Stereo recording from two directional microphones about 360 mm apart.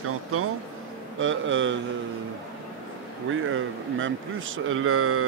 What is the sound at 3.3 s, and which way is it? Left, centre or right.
Speech, right.